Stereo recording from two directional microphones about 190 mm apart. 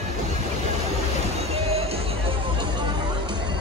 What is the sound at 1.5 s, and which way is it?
Music, 30° right (ahead or behind).